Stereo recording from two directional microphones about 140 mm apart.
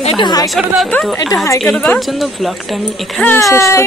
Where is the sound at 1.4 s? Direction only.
20° left (ahead or behind).